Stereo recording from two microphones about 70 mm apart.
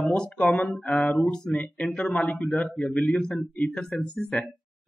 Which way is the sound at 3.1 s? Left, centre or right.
Centre.